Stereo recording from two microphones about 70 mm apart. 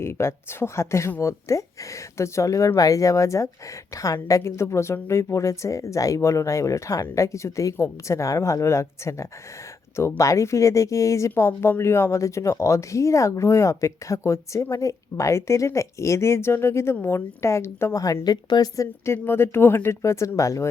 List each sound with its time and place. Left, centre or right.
0.0 s speech: left
17.9 s speech: left
18.2 s a woman's voice: left
18.8 s speech: left